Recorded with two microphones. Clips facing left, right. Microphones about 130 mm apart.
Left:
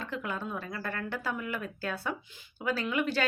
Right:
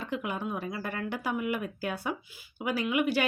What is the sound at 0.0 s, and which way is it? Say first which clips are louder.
Speech: right 2 dB; 15° right (ahead or behind).